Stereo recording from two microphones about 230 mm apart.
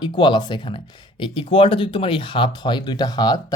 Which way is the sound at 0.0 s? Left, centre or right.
Left.